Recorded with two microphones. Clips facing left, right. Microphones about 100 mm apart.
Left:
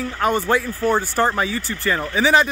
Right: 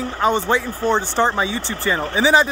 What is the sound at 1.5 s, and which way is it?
Speech, 25° right (ahead or behind).